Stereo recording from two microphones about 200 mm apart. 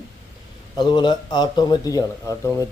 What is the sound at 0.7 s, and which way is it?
Speech, 20° left (ahead or behind).